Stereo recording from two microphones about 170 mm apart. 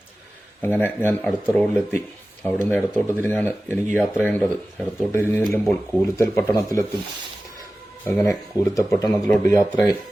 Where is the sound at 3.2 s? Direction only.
10° left (ahead or behind).